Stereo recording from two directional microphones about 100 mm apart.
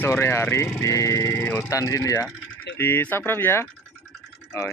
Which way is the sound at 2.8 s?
25° left (ahead or behind).